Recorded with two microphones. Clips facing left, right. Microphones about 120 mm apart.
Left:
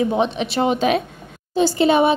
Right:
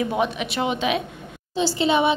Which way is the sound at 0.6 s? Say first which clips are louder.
Left 5 dB; 40° left (ahead or behind).